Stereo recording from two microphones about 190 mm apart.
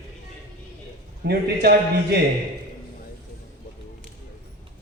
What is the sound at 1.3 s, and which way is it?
Speech, 55° right (ahead or behind).